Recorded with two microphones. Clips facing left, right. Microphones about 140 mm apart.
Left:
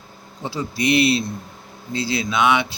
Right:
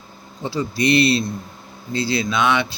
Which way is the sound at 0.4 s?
10° left (ahead or behind).